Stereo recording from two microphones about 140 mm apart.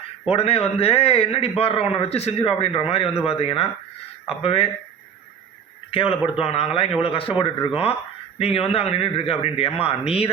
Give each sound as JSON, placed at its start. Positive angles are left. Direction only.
{"t": 0.3, "sound": "speech", "side_deg": 45}
{"t": 5.9, "sound": "speech", "side_deg": 40}